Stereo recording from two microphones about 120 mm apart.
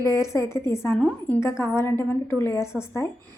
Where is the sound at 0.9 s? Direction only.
10° left (ahead or behind).